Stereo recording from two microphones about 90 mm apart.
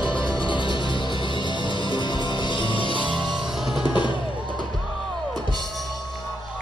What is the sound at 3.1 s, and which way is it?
Music, 55° right (ahead or behind).